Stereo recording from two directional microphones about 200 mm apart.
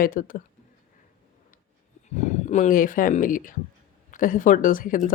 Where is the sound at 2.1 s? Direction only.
35° left (ahead or behind).